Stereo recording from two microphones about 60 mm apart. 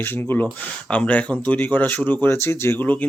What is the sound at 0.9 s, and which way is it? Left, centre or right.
Speech, left.